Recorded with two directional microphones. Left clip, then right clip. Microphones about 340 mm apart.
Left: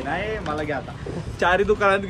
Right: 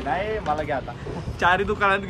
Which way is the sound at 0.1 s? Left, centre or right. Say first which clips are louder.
Right 3 dB; right.